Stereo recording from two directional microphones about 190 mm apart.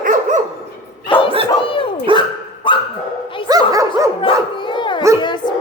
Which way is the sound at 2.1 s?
25° right (ahead or behind).